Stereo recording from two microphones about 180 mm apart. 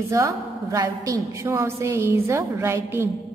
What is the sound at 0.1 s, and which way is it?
A woman's voice, 15° right (ahead or behind).